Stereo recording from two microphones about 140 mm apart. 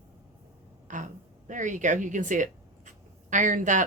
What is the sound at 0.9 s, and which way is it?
A woman's voice, 65° right (ahead or behind).